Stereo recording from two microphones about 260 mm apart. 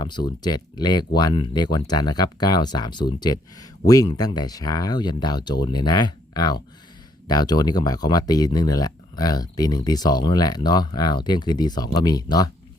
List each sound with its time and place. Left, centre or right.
0.0 s speech: centre